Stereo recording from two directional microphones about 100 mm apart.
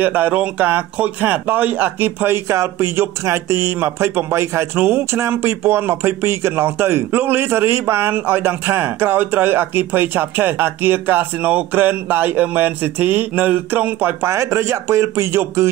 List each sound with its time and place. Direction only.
0.0 s speech: 20° right (ahead or behind)